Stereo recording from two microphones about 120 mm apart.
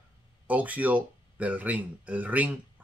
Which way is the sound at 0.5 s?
15° right (ahead or behind).